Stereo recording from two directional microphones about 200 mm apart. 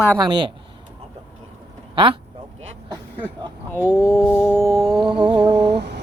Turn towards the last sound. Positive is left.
turn(degrees=-60)  # may be behind; listen again after turning